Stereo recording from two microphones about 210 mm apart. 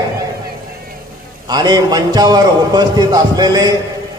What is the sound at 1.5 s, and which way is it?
A man's voice, 20° right (ahead or behind).